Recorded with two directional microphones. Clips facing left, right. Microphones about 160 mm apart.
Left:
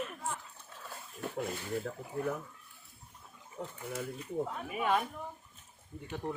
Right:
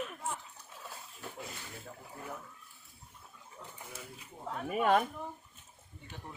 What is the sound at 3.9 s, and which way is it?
Speech, 60° left (ahead or behind).